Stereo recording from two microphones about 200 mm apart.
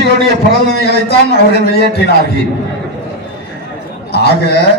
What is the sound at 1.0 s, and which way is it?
Speech, 55° left (ahead or behind).